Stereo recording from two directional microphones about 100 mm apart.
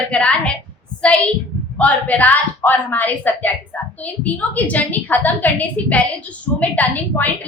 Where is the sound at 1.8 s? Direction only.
15° left (ahead or behind).